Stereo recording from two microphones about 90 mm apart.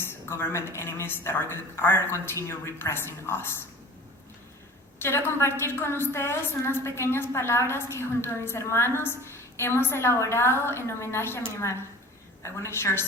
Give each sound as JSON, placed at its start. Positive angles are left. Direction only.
{"t": 0.0, "sound": "a woman's voice", "side_deg": 25}
{"t": 5.0, "sound": "a woman's voice", "side_deg": 30}